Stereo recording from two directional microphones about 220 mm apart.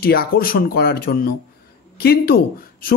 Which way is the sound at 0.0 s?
45° left (ahead or behind).